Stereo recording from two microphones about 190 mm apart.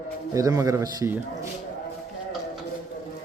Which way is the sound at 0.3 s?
20° right (ahead or behind).